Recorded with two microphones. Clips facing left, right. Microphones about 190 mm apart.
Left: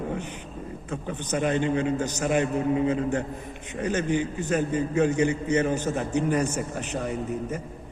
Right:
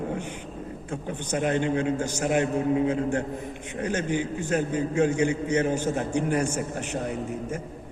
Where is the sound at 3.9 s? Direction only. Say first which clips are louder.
Left 2 dB; 10° right (ahead or behind).